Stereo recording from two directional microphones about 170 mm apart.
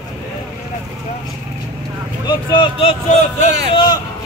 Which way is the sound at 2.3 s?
25° left (ahead or behind).